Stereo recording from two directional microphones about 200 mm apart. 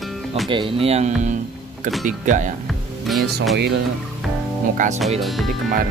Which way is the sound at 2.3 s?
40° right (ahead or behind).